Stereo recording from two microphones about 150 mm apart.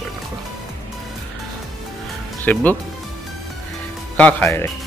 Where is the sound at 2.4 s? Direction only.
10° left (ahead or behind).